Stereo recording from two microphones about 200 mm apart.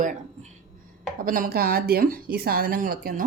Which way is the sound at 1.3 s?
45° right (ahead or behind).